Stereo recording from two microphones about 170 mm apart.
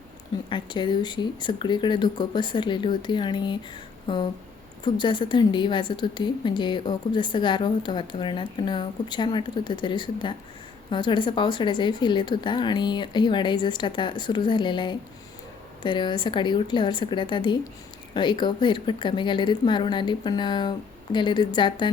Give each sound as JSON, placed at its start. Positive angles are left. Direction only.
{"t": 0.5, "sound": "a woman's voice", "side_deg": 25}
{"t": 4.0, "sound": "a sound", "side_deg": 25}
{"t": 4.8, "sound": "a woman's voice", "side_deg": 25}